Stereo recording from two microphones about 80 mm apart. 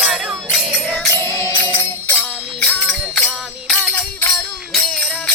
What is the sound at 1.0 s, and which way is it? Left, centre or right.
Music, left.